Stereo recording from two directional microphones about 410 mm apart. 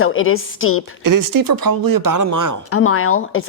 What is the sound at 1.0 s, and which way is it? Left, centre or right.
Speech, right.